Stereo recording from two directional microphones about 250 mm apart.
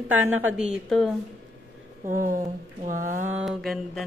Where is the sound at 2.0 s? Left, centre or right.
Right.